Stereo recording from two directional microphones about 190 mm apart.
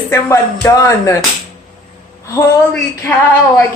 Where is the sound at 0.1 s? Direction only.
15° left (ahead or behind).